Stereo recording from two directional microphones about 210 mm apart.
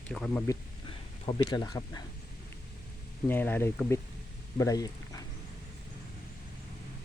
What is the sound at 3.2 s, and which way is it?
Speech, 10° left (ahead or behind).